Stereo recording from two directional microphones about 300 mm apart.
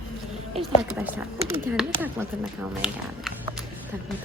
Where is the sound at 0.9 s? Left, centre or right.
Centre.